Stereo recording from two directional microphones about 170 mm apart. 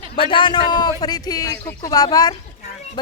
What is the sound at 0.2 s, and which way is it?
A woman's voice, 30° left (ahead or behind).